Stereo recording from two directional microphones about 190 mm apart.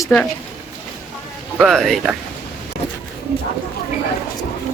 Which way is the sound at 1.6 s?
Centre (ahead or behind).